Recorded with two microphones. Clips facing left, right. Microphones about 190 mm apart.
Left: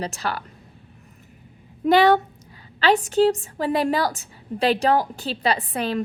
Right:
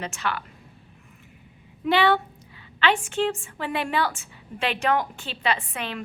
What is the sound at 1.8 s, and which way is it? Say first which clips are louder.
A woman's voice: left 5 dB; 40° left (ahead or behind).